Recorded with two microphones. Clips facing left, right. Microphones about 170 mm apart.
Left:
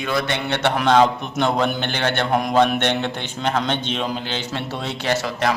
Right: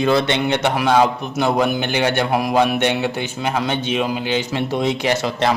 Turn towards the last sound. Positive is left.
turn(degrees=-20)  # may be behind; listen again after turning